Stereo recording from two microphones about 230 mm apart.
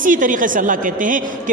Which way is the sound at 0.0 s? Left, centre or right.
Right.